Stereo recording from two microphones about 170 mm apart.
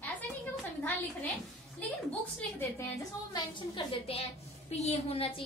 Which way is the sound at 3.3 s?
30° left (ahead or behind).